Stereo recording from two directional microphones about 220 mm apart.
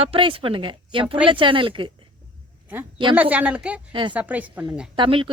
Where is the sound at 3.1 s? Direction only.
5° right (ahead or behind).